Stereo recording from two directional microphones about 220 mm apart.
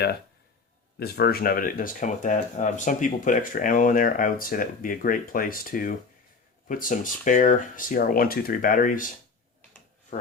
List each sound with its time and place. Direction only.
0.9 s speech: 45° left (ahead or behind)